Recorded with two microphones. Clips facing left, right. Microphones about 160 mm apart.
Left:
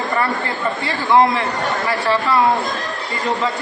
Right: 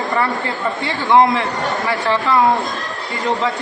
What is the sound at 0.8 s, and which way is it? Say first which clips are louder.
Speech: right 1 dB; 20° right (ahead or behind).